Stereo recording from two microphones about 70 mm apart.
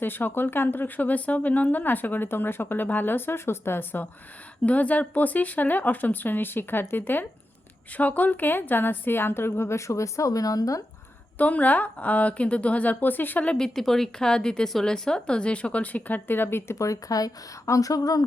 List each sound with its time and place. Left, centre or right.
0.0 s a woman's voice: left
11.3 s speech: left
13.5 s speech: centre; by 16.7 s left
16.7 s speech: left